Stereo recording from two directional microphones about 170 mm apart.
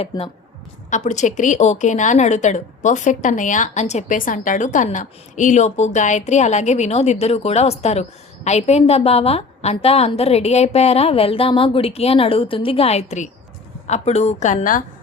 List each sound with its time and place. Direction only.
0.1 s speech: 20° left (ahead or behind)
0.9 s a woman's voice: 45° left (ahead or behind)